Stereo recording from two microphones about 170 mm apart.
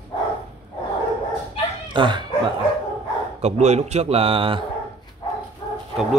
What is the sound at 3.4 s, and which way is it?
A man's voice, 40° right (ahead or behind).